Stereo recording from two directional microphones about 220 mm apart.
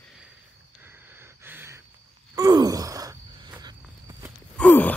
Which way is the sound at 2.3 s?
15° right (ahead or behind).